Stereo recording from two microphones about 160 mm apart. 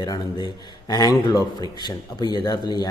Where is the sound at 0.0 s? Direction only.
25° left (ahead or behind).